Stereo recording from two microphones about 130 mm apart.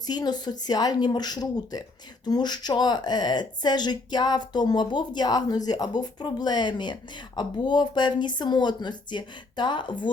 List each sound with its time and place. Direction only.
0.1 s a woman's voice: 30° left (ahead or behind)